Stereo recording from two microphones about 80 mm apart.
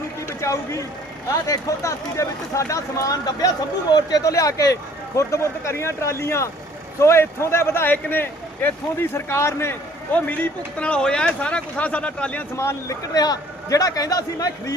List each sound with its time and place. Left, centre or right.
0.3 s speech: left
10.1 s speech: centre
12.5 s speech: left
13.0 s speech: left